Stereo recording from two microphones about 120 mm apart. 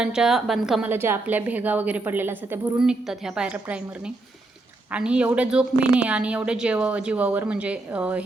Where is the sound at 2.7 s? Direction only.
5° right (ahead or behind).